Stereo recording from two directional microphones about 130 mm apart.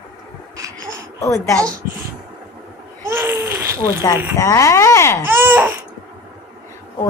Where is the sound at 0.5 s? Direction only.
25° right (ahead or behind).